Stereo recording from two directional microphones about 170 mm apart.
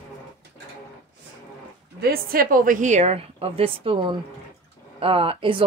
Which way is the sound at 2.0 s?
60° right (ahead or behind).